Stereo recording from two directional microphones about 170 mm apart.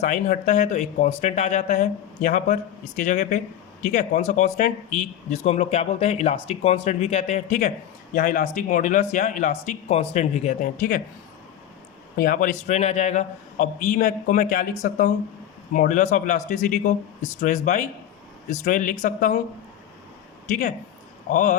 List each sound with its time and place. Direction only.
0.0 s speech: 45° left (ahead or behind)
12.1 s speech: 55° left (ahead or behind)
20.5 s speech: 45° left (ahead or behind)